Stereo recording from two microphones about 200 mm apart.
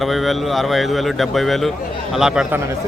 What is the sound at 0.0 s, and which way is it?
Speech, centre (ahead or behind).